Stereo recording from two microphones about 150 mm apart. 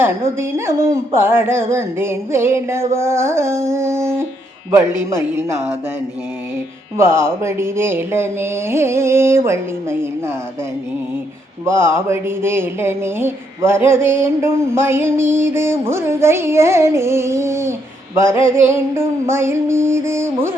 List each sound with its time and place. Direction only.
0.0 s speech: 15° right (ahead or behind)
6.9 s speech: 15° right (ahead or behind)
11.6 s speech: 15° right (ahead or behind)